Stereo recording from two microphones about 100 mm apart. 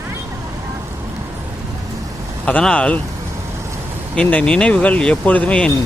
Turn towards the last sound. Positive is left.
turn(degrees=15)  # may be behind; listen again after turning